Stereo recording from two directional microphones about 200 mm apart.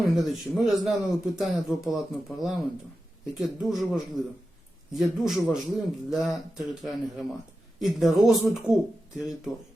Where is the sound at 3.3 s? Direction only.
Centre (ahead or behind).